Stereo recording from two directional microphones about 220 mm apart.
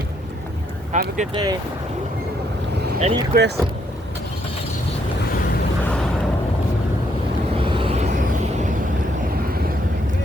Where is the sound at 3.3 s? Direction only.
40° right (ahead or behind).